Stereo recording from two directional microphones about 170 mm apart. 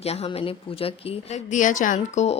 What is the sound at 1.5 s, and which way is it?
Speech, 45° left (ahead or behind).